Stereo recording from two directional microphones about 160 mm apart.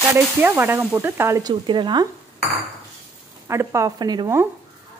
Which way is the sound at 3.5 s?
15° right (ahead or behind).